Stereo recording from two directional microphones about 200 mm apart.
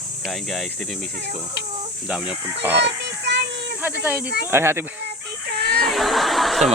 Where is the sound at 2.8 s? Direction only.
60° right (ahead or behind).